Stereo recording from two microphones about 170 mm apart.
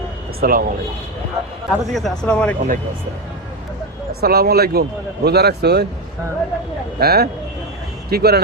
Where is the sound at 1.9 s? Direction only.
5° left (ahead or behind).